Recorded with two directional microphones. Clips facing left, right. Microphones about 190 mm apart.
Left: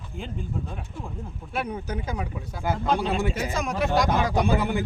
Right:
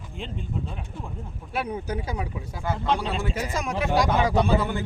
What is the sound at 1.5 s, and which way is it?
Speech, 10° right (ahead or behind).